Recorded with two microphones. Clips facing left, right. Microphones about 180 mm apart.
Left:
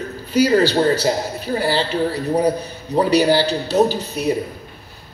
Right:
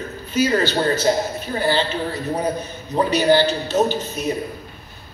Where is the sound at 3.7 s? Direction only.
15° left (ahead or behind).